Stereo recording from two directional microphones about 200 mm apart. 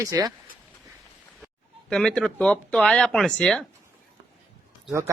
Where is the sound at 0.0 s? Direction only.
20° right (ahead or behind).